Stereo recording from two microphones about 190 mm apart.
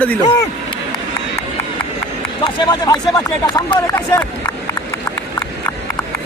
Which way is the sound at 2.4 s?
20° left (ahead or behind).